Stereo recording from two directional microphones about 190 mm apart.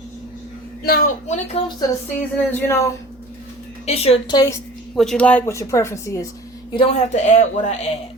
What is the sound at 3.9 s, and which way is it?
Speech, 30° left (ahead or behind).